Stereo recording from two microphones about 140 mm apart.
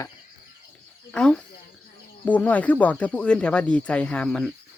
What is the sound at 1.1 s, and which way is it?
Speech, 5° left (ahead or behind).